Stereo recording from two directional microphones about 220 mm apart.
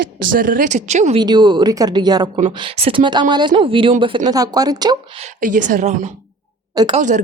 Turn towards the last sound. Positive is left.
turn(degrees=-35)  # may be behind; listen again after turning